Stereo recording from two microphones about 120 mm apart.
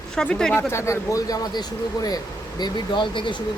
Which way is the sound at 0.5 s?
25° left (ahead or behind).